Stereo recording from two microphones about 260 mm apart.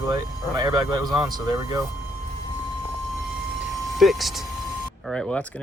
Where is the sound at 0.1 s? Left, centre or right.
Centre.